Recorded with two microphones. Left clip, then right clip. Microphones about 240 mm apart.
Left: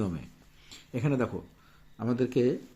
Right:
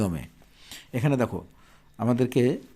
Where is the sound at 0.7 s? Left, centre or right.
Right.